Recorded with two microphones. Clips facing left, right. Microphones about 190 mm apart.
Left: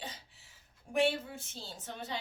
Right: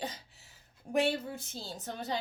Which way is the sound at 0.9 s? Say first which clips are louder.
Right 1 dB; 40° right (ahead or behind).